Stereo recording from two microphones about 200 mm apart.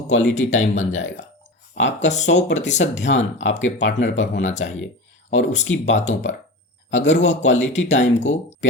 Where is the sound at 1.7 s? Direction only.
65° left (ahead or behind).